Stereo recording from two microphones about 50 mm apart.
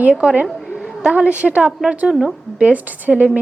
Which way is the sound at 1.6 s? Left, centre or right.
Centre.